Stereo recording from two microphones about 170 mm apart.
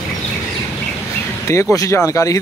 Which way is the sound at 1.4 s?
20° left (ahead or behind).